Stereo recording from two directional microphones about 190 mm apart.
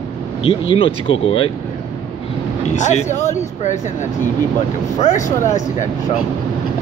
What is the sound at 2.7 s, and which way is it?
Speech, 40° left (ahead or behind).